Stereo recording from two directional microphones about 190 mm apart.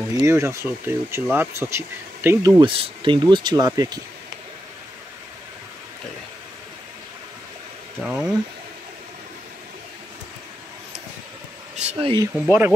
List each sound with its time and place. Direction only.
0.1 s speech: 15° right (ahead or behind)
2.6 s speech: 30° right (ahead or behind)
8.0 s speech: 5° right (ahead or behind)
11.7 s speech: 35° right (ahead or behind)
12.4 s speech: 10° right (ahead or behind)